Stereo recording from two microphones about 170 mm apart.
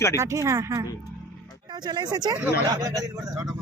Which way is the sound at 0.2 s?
15° right (ahead or behind).